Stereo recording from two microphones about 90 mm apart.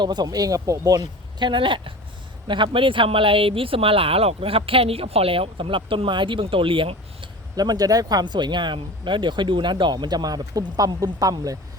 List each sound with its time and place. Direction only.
0.0 s speech: 55° right (ahead or behind); by 7.3 s 75° right (ahead or behind)
7.5 s speech: 45° right (ahead or behind)